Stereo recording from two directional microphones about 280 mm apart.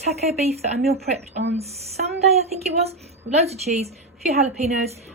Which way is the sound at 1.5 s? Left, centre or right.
Right.